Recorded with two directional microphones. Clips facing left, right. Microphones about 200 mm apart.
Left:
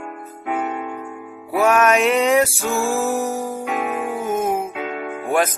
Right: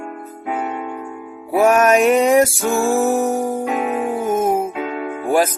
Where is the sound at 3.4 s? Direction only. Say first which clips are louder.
Right 4 dB; 50° right (ahead or behind).